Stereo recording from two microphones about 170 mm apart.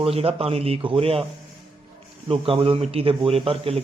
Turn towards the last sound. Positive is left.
turn(degrees=-35)  # may be behind; listen again after turning